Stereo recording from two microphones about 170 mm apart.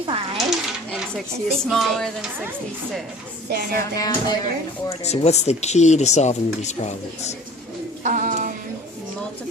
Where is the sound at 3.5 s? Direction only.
65° right (ahead or behind).